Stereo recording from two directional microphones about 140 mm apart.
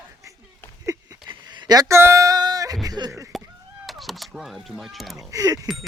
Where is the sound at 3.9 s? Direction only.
Centre (ahead or behind).